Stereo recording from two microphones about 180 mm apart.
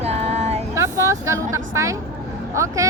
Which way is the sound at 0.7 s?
15° right (ahead or behind).